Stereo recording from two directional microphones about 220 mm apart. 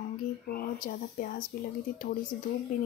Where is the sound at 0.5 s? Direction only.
45° left (ahead or behind).